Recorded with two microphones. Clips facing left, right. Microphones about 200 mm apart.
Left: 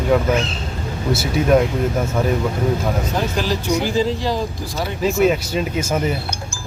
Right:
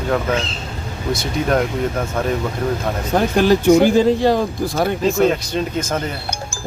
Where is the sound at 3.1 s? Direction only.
55° right (ahead or behind).